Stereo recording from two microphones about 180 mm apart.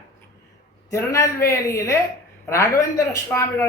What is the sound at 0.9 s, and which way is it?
Speech, 15° left (ahead or behind).